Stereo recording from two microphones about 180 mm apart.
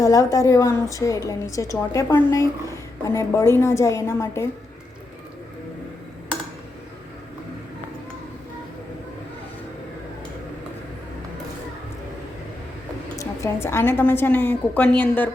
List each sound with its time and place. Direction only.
0.0 s a woman's voice: 20° left (ahead or behind)
13.1 s a woman's voice: 15° left (ahead or behind)